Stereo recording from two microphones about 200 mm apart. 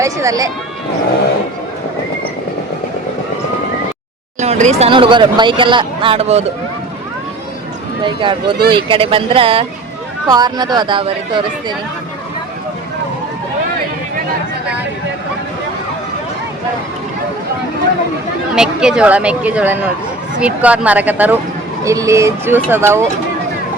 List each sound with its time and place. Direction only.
0.0 s speech: 15° right (ahead or behind)
4.4 s speech: 35° right (ahead or behind)
8.0 s speech: 25° right (ahead or behind)
18.5 s speech: 5° right (ahead or behind)